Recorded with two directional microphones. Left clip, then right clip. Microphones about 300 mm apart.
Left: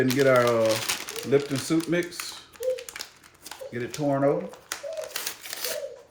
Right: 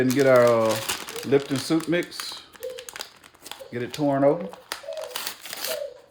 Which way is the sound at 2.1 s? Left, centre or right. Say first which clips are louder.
Right 1 dB; centre.